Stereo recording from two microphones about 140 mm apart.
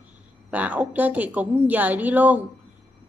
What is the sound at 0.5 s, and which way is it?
A woman's voice, 10° right (ahead or behind).